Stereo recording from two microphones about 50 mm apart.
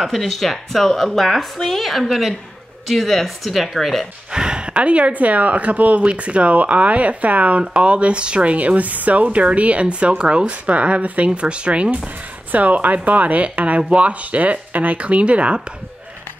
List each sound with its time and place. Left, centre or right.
0.0 s speech: centre
4.3 s speech: centre